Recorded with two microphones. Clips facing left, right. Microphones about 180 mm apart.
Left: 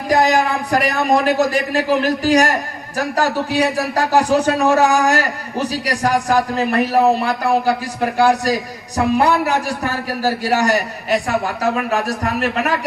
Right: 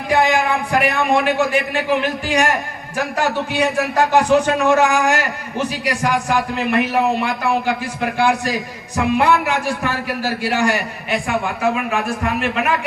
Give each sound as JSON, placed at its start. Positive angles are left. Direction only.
{"t": 0.1, "sound": "a man's voice", "side_deg": 40}